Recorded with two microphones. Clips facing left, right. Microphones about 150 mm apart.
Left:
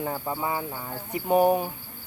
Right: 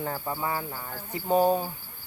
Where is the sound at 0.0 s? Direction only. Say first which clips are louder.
Left 2 dB; 15° left (ahead or behind).